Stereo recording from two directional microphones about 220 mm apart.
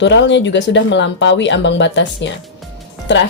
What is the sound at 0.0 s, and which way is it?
Speech, 55° left (ahead or behind).